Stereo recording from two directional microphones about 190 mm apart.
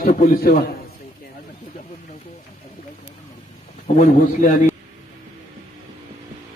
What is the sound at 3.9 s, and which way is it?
Speech, 45° left (ahead or behind).